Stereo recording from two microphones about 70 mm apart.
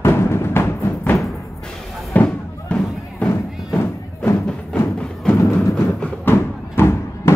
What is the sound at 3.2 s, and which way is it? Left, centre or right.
Music, left.